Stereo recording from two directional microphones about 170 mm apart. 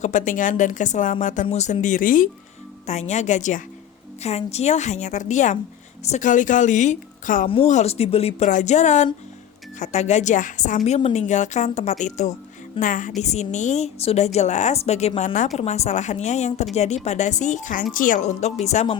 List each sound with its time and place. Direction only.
0.0 s a woman's voice: 50° left (ahead or behind)
2.8 s a woman's voice: 45° left (ahead or behind)
7.4 s a woman's voice: 35° left (ahead or behind)